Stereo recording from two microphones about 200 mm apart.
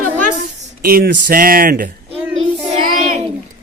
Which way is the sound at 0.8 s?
50° right (ahead or behind).